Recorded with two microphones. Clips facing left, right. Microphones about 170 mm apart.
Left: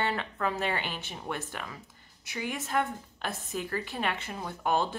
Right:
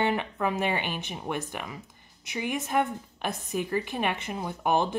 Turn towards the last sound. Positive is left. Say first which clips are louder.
# right 3 dB
turn(degrees=-15)  # may be behind; listen again after turning